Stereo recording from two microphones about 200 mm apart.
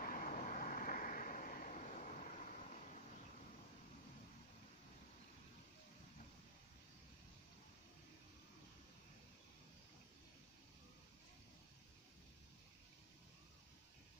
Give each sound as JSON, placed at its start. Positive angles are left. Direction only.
{"t": 0.0, "sound": "vehicle", "side_deg": 45}